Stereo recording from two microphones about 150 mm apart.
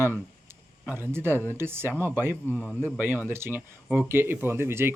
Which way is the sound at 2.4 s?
15° left (ahead or behind).